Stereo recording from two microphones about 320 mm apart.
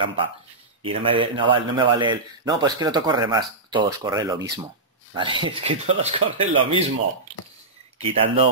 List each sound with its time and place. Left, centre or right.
0.0 s a man's voice: centre
8.0 s speech: centre